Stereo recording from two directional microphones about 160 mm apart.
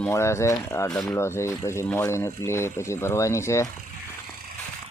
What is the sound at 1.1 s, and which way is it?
Speech, 15° left (ahead or behind).